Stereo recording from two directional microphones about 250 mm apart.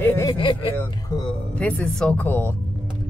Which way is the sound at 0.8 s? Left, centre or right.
Centre.